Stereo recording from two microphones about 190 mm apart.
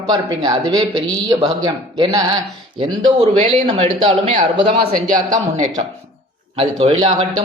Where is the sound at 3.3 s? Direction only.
35° right (ahead or behind).